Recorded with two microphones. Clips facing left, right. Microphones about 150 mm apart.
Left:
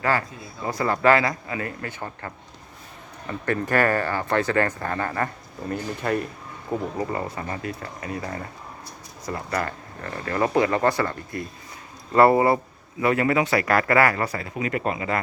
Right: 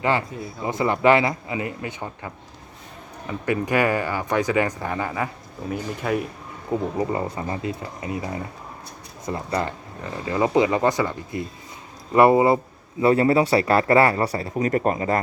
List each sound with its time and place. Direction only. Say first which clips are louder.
0.0 s a man's voice: right 2 dB; 20° right (ahead or behind); by 6.2 s 5° right (ahead or behind)
6.7 s speech: right 3 dB; 15° right (ahead or behind)
13.0 s a man's voice: right 4 dB; 30° right (ahead or behind)